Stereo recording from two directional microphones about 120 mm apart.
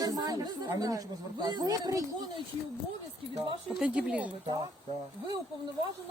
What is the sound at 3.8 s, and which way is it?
Speech, 10° right (ahead or behind).